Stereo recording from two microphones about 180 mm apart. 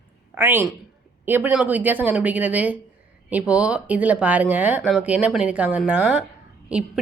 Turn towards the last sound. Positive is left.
turn(degrees=-5)  # may be behind; listen again after turning